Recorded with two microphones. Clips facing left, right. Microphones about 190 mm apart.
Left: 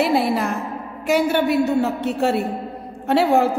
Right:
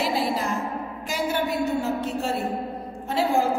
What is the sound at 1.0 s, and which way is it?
A woman's voice, 65° left (ahead or behind).